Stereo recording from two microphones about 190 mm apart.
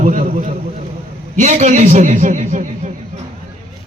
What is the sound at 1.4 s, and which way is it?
A man's voice, 40° right (ahead or behind).